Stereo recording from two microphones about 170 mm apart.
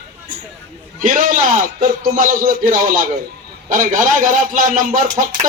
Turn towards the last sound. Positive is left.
turn(degrees=-50)  # may be behind; listen again after turning